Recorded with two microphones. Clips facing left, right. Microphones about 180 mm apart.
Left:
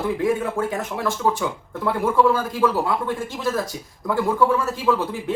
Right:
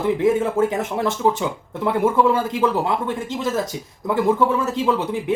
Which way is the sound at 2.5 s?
20° right (ahead or behind).